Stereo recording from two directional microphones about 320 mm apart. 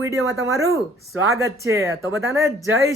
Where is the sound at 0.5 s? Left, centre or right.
Centre.